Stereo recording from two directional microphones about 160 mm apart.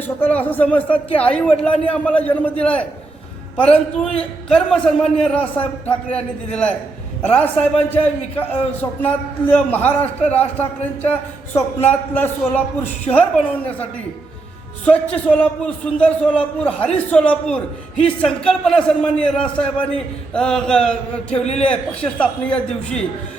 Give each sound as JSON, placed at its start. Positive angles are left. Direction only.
{"t": 0.2, "sound": "a man's voice", "side_deg": 10}
{"t": 14.8, "sound": "a man's voice", "side_deg": 10}
{"t": 20.3, "sound": "a sound", "side_deg": 5}
{"t": 21.2, "sound": "a man's voice", "side_deg": 40}
{"t": 21.5, "sound": "a man's voice", "side_deg": 5}